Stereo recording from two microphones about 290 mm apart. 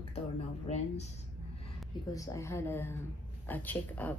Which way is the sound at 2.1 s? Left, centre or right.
Centre.